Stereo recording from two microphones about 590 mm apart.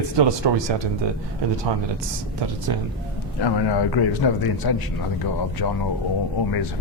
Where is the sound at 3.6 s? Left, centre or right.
Left.